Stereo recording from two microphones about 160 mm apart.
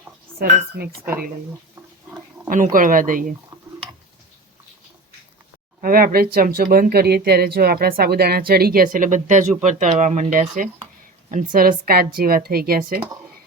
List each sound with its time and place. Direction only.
0.3 s speech: 70° right (ahead or behind)
2.7 s speech: 55° right (ahead or behind)
5.8 s speech: 60° right (ahead or behind)